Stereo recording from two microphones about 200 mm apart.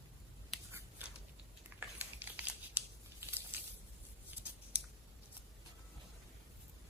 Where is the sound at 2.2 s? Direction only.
10° right (ahead or behind).